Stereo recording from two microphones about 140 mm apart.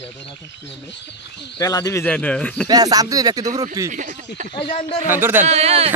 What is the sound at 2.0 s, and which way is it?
Speech, 10° left (ahead or behind).